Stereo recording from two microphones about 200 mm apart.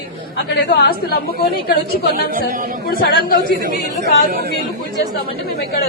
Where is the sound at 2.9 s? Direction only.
45° left (ahead or behind).